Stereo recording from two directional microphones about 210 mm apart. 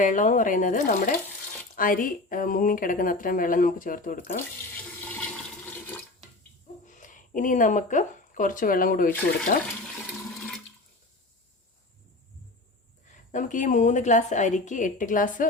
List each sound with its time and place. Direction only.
0.0 s speech: 35° left (ahead or behind)
6.8 s speech: 35° left (ahead or behind)
13.3 s speech: 40° left (ahead or behind)